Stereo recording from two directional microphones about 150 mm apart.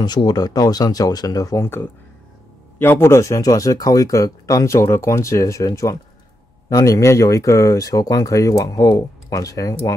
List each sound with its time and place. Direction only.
0.0 s speech: 30° left (ahead or behind)